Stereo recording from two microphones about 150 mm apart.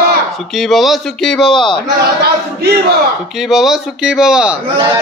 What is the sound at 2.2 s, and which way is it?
Speech, 90° right.